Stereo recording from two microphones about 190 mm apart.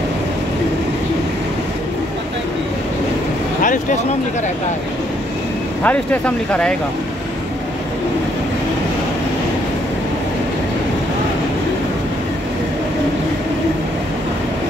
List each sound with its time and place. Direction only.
3.6 s speech: 45° left (ahead or behind)
5.9 s speech: 5° left (ahead or behind)